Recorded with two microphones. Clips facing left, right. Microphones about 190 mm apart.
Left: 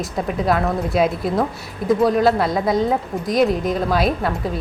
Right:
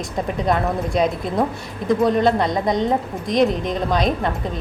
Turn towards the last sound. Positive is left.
turn(degrees=5)  # may be behind; listen again after turning